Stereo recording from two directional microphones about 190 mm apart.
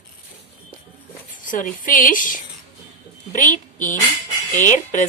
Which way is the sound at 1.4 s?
45° left (ahead or behind).